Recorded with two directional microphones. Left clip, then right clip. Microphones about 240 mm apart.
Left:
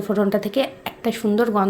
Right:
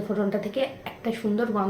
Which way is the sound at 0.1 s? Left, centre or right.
Left.